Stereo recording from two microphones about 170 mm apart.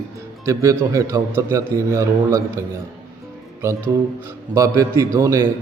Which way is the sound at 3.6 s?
15° right (ahead or behind).